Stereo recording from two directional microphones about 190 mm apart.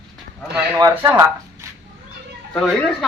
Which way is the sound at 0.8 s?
15° right (ahead or behind).